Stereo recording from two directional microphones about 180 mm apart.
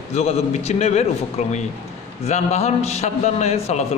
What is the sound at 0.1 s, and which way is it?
Speech, 35° left (ahead or behind).